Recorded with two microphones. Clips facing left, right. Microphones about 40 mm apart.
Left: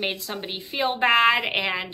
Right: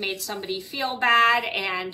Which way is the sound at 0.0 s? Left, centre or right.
Left.